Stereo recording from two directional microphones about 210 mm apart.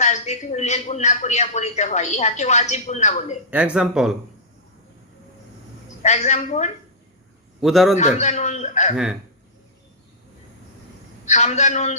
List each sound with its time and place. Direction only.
0.0 s a man's voice: 35° left (ahead or behind)
3.5 s speech: 5° right (ahead or behind)
6.0 s a man's voice: 35° left (ahead or behind)
7.6 s speech: centre (ahead or behind)
7.9 s a man's voice: 35° left (ahead or behind)
11.3 s a man's voice: 35° left (ahead or behind)